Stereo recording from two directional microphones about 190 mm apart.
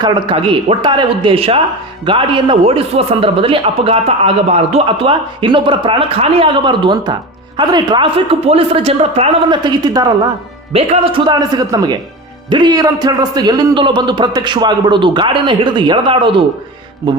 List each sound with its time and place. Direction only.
0.0 s a man's voice: 25° right (ahead or behind)